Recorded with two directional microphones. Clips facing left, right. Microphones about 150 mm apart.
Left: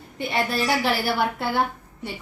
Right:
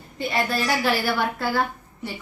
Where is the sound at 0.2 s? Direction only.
20° left (ahead or behind).